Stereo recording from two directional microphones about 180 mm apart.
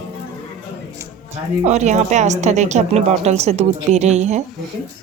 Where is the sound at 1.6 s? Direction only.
40° right (ahead or behind).